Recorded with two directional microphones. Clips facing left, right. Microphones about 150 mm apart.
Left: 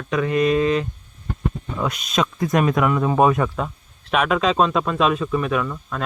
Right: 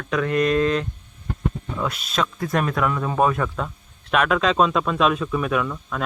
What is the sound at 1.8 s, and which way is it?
Speech, 15° left (ahead or behind).